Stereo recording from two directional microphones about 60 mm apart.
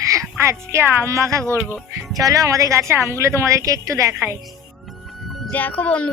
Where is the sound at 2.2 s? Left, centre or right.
Right.